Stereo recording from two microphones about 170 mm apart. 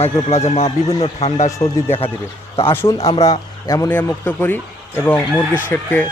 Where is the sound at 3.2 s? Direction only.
20° left (ahead or behind).